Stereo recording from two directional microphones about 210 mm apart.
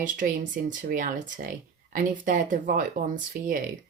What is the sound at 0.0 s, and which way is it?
Speech, 40° right (ahead or behind).